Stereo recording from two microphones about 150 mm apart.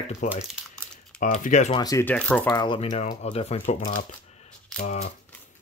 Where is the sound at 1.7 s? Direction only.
25° left (ahead or behind).